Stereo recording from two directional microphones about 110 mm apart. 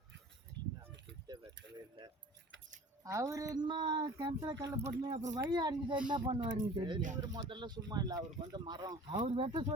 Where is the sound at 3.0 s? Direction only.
30° right (ahead or behind); by 9.6 s 55° right (ahead or behind).